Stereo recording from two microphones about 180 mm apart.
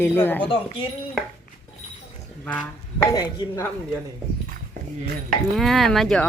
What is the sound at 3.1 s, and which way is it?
Speech, 20° left (ahead or behind).